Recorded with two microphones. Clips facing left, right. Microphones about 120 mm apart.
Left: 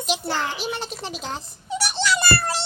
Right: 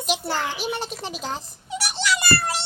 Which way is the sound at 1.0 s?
45° right (ahead or behind).